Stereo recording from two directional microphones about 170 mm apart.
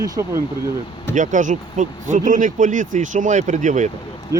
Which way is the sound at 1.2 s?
45° right (ahead or behind).